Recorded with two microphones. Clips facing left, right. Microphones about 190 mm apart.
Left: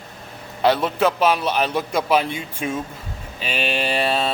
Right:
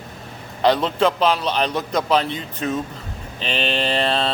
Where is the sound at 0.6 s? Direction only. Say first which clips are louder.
Right 1 dB; 5° left (ahead or behind).